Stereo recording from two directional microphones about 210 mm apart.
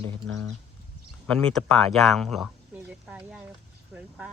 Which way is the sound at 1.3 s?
5° left (ahead or behind).